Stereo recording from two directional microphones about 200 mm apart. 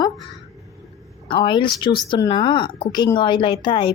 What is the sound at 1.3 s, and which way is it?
A woman's voice, 25° left (ahead or behind).